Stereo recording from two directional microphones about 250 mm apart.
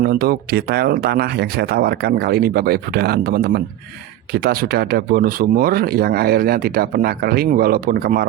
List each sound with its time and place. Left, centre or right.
0.0 s speech: right